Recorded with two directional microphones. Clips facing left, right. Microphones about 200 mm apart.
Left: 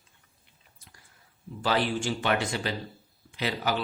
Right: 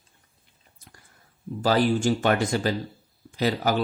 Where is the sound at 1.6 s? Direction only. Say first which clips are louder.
Right 6 dB; 40° right (ahead or behind).